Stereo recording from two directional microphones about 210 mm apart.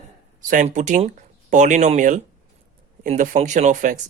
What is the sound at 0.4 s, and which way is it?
Speech, 35° right (ahead or behind).